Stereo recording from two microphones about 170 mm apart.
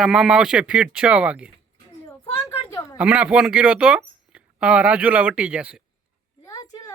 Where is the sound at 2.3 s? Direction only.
15° left (ahead or behind).